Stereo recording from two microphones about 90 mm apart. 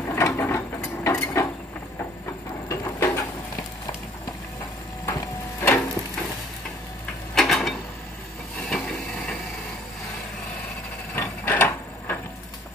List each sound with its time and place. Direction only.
0.1 s ratchet: 30° left (ahead or behind)
2.7 s a sound: 35° left (ahead or behind)
5.0 s wood: 25° left (ahead or behind)
7.3 s mechanisms: 5° left (ahead or behind)
8.5 s wood: 5° left (ahead or behind)
11.1 s ratchet: 20° left (ahead or behind)